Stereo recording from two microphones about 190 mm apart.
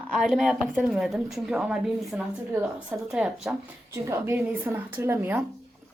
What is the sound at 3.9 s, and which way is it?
Speech, 15° right (ahead or behind).